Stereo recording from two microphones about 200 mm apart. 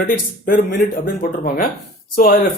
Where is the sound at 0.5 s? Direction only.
45° left (ahead or behind).